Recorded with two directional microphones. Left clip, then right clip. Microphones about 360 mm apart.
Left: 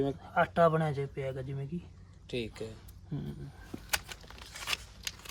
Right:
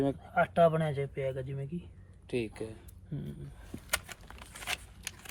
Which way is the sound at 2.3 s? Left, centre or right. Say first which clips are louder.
Right 2 dB; centre.